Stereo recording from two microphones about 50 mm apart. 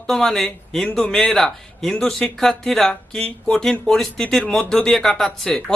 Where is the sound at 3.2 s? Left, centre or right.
Left.